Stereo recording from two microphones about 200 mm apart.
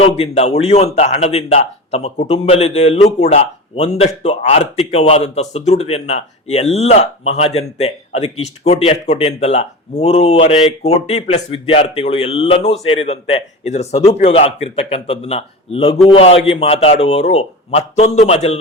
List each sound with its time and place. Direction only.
0.0 s a man's voice: 30° left (ahead or behind)